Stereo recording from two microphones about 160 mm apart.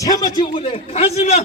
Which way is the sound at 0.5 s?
35° left (ahead or behind).